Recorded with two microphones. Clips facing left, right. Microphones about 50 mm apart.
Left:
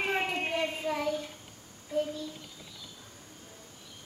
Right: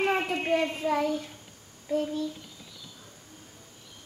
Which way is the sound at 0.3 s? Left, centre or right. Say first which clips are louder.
Right 5 dB; right.